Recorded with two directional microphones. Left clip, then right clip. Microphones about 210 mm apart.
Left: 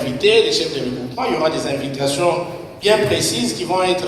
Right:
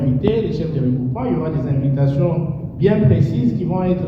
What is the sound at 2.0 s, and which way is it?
Speech, 50° left (ahead or behind).